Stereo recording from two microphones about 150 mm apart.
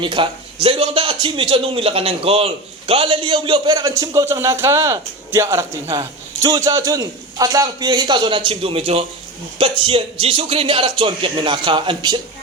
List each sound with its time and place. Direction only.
0.0 s a man's voice: 35° right (ahead or behind)